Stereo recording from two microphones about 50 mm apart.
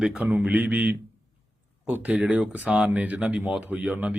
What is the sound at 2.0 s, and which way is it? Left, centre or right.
Speech, right.